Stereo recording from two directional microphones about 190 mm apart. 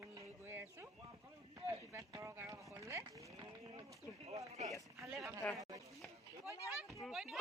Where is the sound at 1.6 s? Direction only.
15° right (ahead or behind).